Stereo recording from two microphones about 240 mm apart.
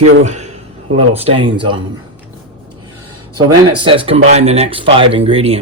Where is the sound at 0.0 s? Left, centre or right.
Right.